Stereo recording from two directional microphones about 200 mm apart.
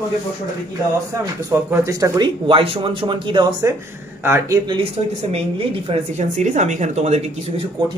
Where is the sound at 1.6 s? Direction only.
15° right (ahead or behind).